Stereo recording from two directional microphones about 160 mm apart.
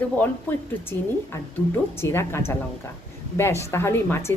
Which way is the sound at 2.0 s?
15° left (ahead or behind).